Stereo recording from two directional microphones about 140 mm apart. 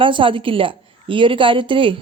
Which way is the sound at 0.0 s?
40° right (ahead or behind).